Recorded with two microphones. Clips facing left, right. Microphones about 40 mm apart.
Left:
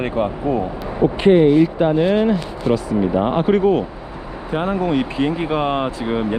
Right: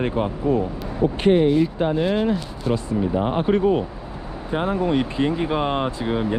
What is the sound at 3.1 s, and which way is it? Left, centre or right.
Speech, left.